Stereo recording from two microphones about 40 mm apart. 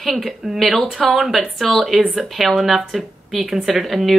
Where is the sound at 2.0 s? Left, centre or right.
Right.